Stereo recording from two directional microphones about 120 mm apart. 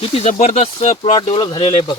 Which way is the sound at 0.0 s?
55° left (ahead or behind).